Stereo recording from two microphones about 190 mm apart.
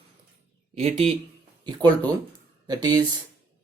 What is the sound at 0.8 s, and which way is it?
Speech, 35° right (ahead or behind).